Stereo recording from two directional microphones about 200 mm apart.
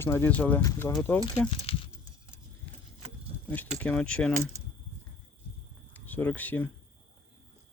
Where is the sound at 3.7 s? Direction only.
5° left (ahead or behind).